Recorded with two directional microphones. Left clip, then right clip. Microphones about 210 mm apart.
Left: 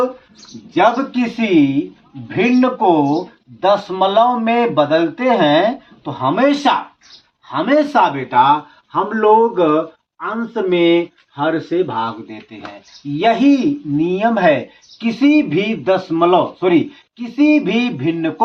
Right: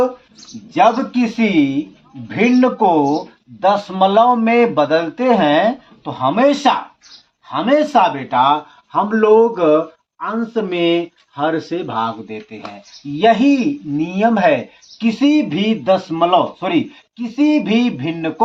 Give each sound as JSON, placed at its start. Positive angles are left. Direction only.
{"t": 0.7, "sound": "speech", "side_deg": -30}
{"t": 10.2, "sound": "speech", "side_deg": -30}